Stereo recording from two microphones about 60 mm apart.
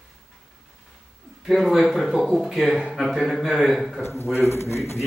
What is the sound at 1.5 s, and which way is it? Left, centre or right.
Speech, centre.